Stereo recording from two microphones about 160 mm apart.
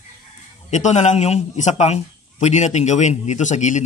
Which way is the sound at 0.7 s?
45° left (ahead or behind).